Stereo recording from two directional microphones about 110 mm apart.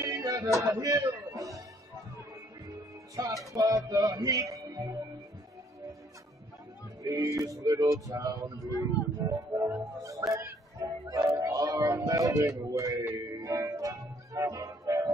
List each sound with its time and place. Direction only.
0.0 s a sound: 30° right (ahead or behind)
0.6 s music: 30° right (ahead or behind)
3.2 s music: 30° right (ahead or behind)
7.0 s music: 30° right (ahead or behind)